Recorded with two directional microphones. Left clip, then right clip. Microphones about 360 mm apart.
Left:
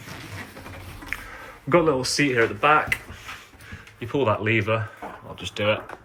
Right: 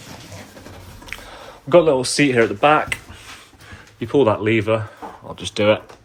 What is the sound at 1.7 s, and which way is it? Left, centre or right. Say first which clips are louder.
Speech: right 6 dB; centre.